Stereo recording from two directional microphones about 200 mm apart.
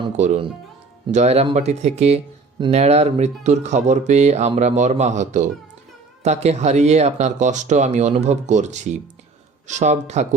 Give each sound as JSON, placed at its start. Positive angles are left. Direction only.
{"t": 0.2, "sound": "speech", "side_deg": -30}